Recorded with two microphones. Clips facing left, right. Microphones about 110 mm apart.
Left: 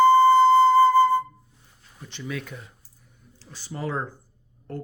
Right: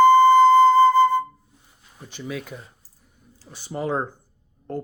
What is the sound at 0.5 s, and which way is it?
Flute, 20° right (ahead or behind).